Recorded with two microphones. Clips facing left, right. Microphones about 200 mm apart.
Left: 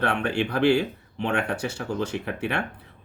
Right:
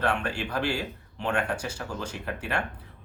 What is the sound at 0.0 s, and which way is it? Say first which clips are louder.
Speech: left 4 dB; 60° left (ahead or behind).